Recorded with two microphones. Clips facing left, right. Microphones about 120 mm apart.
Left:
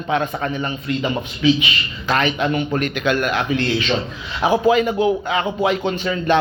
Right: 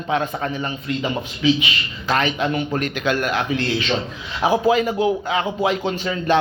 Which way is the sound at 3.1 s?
55° left (ahead or behind).